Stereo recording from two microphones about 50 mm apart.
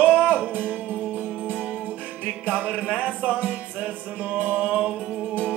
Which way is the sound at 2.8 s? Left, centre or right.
Right.